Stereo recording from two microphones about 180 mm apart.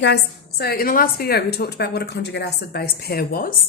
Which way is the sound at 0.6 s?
55° left (ahead or behind).